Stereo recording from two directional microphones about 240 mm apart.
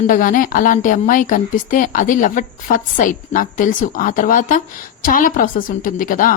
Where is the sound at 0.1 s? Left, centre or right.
Left.